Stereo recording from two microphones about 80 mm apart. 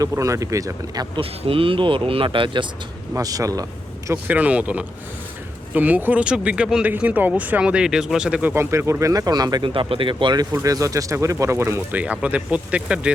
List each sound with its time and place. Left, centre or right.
0.0 s speech: right
1.7 s speech: right
3.2 s a man's voice: right
4.3 s speech: centre
6.9 s speech: right
8.5 s speech: right
10.5 s speech: right
11.9 s speech: centre